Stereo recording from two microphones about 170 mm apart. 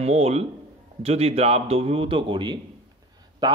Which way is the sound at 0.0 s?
40° right (ahead or behind).